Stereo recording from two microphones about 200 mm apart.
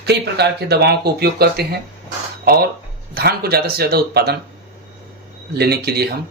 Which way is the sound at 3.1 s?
50° right (ahead or behind).